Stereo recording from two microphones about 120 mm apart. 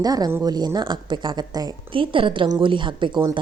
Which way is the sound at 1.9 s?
45° right (ahead or behind).